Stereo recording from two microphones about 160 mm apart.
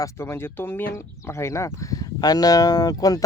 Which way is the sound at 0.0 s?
15° left (ahead or behind).